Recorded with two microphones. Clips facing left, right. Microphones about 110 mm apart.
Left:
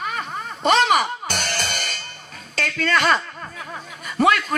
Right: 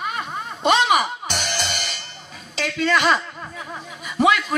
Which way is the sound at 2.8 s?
10° right (ahead or behind).